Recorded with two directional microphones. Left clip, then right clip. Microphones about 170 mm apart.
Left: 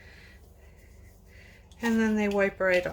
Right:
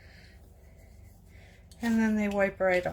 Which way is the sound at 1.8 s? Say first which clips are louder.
Left 2 dB; 25° left (ahead or behind).